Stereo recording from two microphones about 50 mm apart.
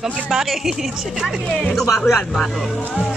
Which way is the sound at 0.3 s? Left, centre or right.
Centre.